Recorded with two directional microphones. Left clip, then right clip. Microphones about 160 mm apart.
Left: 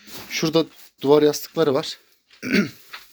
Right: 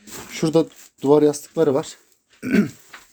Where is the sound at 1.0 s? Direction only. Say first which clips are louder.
Even; 5° right (ahead or behind).